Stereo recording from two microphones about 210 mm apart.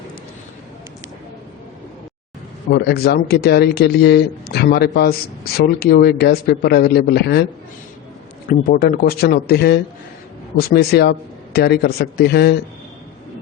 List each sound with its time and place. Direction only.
2.6 s speech: 50° left (ahead or behind)
8.4 s speech: 45° left (ahead or behind)